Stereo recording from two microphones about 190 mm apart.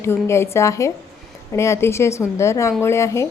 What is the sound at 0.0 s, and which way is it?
A woman's voice, 15° left (ahead or behind).